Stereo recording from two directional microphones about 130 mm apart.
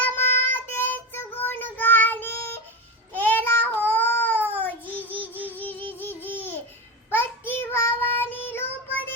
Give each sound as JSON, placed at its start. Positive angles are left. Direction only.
{"t": 0.0, "sound": "child singing", "side_deg": 15}
{"t": 3.8, "sound": "a sound", "side_deg": 15}
{"t": 5.2, "sound": "music", "side_deg": -15}
{"t": 6.0, "sound": "babbling", "side_deg": 15}
{"t": 7.1, "sound": "child singing", "side_deg": 15}